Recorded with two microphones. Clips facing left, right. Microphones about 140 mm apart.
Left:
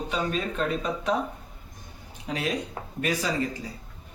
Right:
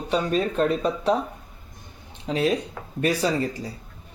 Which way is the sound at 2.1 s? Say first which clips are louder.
Right 6 dB; 30° right (ahead or behind).